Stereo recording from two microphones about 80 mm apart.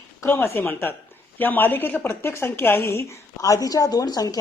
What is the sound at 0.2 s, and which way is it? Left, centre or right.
A woman's voice, left.